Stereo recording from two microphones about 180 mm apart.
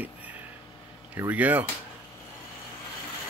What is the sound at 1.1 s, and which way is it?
Speech, 10° right (ahead or behind).